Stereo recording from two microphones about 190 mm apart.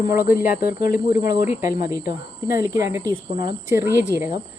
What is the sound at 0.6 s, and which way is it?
Speech, 50° left (ahead or behind).